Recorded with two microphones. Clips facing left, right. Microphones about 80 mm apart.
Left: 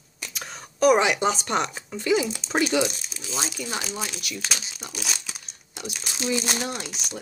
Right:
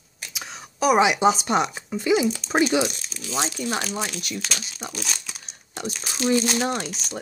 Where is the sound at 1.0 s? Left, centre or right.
Centre.